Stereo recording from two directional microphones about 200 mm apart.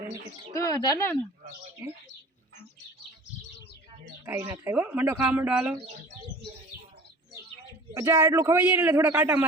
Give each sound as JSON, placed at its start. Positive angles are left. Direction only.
{"t": 0.5, "sound": "speech", "side_deg": 15}
{"t": 4.3, "sound": "speech", "side_deg": -10}
{"t": 7.9, "sound": "speech", "side_deg": -15}